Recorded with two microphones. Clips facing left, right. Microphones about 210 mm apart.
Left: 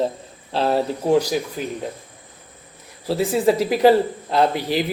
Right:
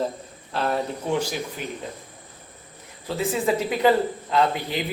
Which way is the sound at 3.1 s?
35° left (ahead or behind).